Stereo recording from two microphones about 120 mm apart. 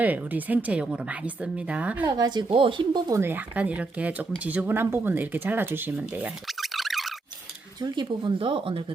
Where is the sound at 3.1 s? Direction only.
20° right (ahead or behind).